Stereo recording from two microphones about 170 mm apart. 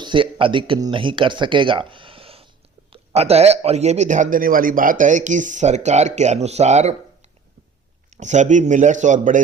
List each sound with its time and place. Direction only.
0.0 s a man's voice: 30° right (ahead or behind); by 9.4 s 50° right (ahead or behind)